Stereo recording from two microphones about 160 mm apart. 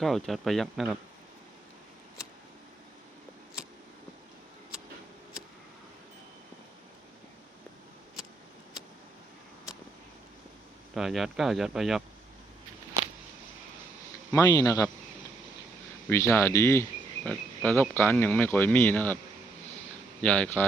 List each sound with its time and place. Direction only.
0.0 s speech: centre (ahead or behind)
10.9 s speech: centre (ahead or behind)
14.3 s speech: 20° left (ahead or behind)
16.0 s speech: 15° left (ahead or behind)
20.2 s speech: 10° left (ahead or behind)